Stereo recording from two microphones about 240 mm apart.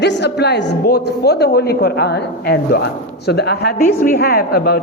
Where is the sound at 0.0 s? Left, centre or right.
Left.